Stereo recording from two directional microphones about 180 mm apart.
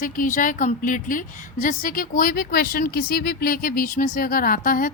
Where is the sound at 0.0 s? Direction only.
50° left (ahead or behind).